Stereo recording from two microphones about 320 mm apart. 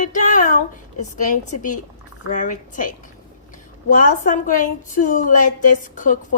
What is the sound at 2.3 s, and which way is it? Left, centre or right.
A woman's voice, left.